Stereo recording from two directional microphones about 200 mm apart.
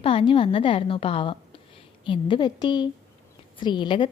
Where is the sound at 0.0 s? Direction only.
25° left (ahead or behind).